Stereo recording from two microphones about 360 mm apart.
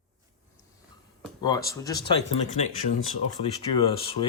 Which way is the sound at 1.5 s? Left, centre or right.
Centre.